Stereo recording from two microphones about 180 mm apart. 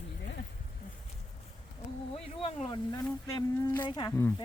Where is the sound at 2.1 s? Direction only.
35° left (ahead or behind).